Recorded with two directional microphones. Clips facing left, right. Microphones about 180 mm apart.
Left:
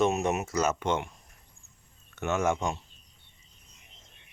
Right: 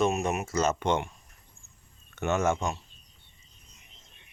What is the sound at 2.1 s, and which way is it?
Speech, 5° left (ahead or behind).